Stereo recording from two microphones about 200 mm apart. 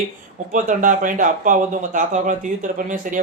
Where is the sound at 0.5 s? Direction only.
40° right (ahead or behind).